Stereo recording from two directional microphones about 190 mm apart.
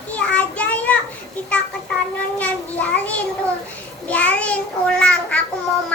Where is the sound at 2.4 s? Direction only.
5° left (ahead or behind).